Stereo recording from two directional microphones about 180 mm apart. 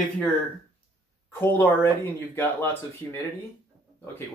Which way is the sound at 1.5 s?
10° left (ahead or behind).